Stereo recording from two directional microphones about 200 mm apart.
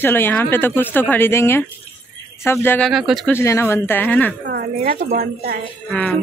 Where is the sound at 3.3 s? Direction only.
15° left (ahead or behind).